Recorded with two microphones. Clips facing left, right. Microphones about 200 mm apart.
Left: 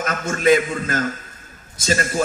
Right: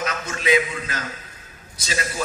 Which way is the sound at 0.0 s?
50° left (ahead or behind).